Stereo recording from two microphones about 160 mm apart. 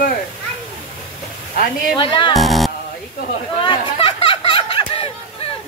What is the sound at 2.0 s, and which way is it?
Speech, 30° left (ahead or behind).